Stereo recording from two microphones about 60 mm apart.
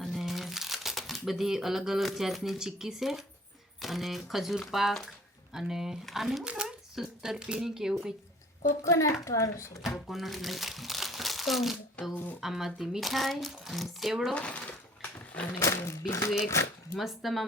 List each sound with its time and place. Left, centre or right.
0.0 s speech: centre
6.4 s speech: centre
8.8 s speech: left
9.8 s speech: centre
14.3 s speech: centre
14.7 s a sound: left
15.6 s speech: left
17.0 s speech: centre